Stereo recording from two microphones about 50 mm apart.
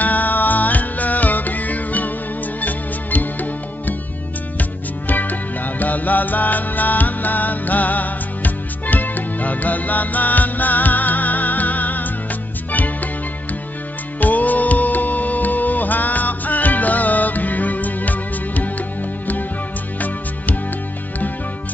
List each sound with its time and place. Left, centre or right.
0.0 s music: left
14.2 s music: left